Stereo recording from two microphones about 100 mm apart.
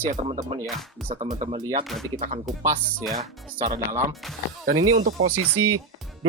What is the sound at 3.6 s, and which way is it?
Speech, 35° right (ahead or behind).